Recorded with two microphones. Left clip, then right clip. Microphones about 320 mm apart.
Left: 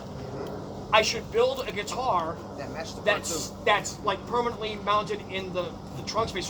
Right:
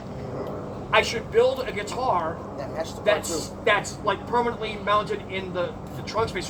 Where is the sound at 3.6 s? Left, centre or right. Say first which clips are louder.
Right 2 dB; centre.